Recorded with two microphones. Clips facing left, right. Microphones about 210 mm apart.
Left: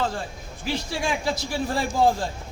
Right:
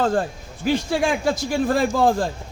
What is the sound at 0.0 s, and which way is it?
A man's voice, 50° right (ahead or behind).